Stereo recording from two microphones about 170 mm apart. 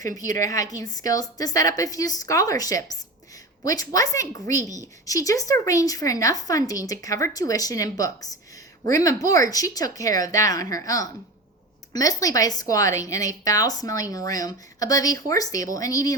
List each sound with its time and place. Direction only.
0.0 s a woman's voice: 20° left (ahead or behind)